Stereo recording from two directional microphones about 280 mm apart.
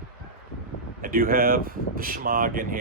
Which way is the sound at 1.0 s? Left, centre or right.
Right.